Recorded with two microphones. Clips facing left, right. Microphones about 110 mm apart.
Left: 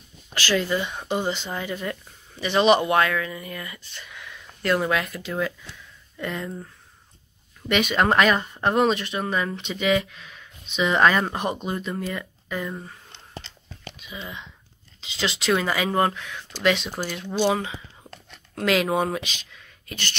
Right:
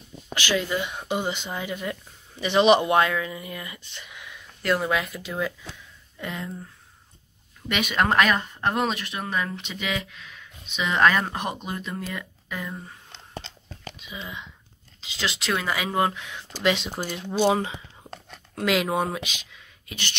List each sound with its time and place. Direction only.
0.3 s speech: 15° right (ahead or behind)
4.6 s speech: centre (ahead or behind)
7.6 s speech: 10° right (ahead or behind)
14.1 s speech: 5° right (ahead or behind)
16.6 s speech: 20° right (ahead or behind)
18.5 s speech: 10° right (ahead or behind)